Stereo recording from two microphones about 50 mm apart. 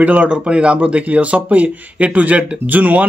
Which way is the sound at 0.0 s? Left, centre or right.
Right.